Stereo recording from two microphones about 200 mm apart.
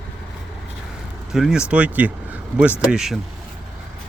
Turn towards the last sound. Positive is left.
turn(degrees=0)  # may be behind; listen again after turning